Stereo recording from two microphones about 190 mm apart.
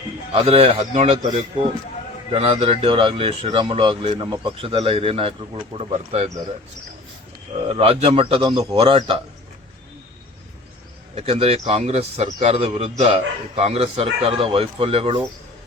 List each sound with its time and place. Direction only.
0.4 s a man's voice: 35° right (ahead or behind)
7.7 s a man's voice: 30° right (ahead or behind)
11.1 s a man's voice: 30° right (ahead or behind)